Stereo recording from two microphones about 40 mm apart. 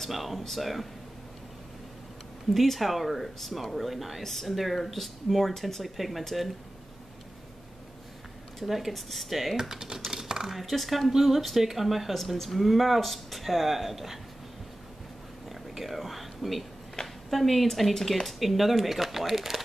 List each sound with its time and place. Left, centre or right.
0.0 s speech: centre
2.5 s speech: centre
8.5 s speech: centre
9.6 s speech: centre
10.5 s speech: centre
15.7 s a sound: centre
17.3 s speech: centre